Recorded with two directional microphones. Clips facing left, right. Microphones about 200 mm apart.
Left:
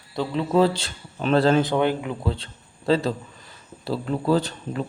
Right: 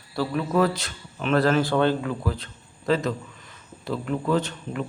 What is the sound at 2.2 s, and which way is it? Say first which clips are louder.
A man's voice: left 1 dB; 25° left (ahead or behind).